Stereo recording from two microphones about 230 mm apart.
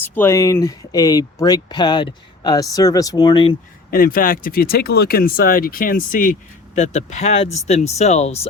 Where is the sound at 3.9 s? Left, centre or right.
Left.